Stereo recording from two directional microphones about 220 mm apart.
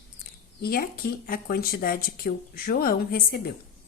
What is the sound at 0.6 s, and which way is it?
Speech, 45° left (ahead or behind).